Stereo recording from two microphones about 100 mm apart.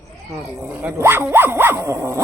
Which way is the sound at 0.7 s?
20° right (ahead or behind).